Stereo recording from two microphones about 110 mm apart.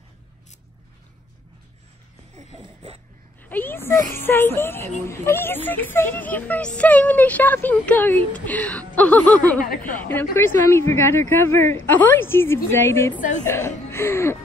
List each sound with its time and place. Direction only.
3.4 s speech: 20° left (ahead or behind)